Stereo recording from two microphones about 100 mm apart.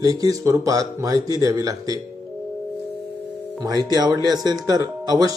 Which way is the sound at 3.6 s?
40° right (ahead or behind).